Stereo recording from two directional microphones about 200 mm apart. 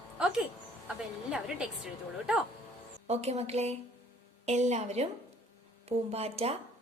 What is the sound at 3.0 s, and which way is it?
A woman's voice, 30° right (ahead or behind).